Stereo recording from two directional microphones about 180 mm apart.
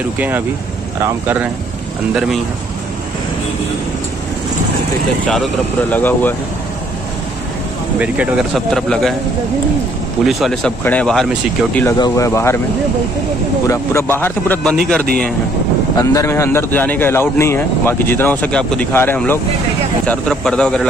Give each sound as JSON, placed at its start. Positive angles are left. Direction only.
{"t": 1.0, "sound": "speech", "side_deg": -10}
{"t": 5.2, "sound": "speech", "side_deg": 5}
{"t": 8.0, "sound": "speech", "side_deg": -5}
{"t": 10.2, "sound": "speech", "side_deg": 0}
{"t": 12.0, "sound": "speech", "side_deg": 15}
{"t": 13.7, "sound": "speech", "side_deg": 15}
{"t": 16.0, "sound": "speech", "side_deg": 20}